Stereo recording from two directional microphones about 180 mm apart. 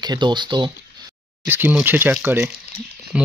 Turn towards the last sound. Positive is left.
turn(degrees=-5)  # may be behind; listen again after turning